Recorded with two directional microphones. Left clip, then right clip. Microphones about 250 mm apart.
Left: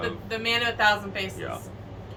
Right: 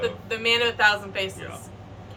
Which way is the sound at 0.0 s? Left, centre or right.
Centre.